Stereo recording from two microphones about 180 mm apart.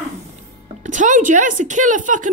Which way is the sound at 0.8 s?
45° right (ahead or behind).